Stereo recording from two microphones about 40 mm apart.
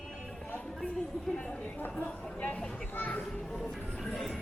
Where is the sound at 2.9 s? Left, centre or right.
Left.